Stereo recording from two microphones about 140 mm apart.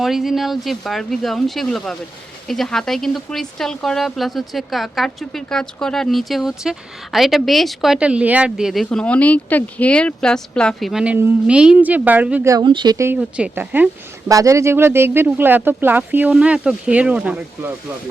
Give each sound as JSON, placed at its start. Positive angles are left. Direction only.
{"t": 0.0, "sound": "speech", "side_deg": 0}
{"t": 12.5, "sound": "speech", "side_deg": -30}
{"t": 13.1, "sound": "speech", "side_deg": -10}
{"t": 14.3, "sound": "speech", "side_deg": -25}